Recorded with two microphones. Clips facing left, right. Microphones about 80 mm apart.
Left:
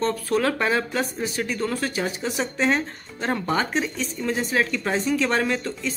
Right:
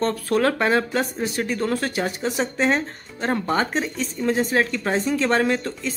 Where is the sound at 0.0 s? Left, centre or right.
Right.